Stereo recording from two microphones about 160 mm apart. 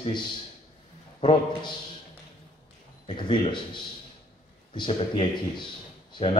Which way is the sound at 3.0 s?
30° left (ahead or behind).